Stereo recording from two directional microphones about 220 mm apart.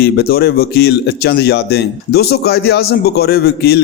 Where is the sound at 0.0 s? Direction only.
45° left (ahead or behind).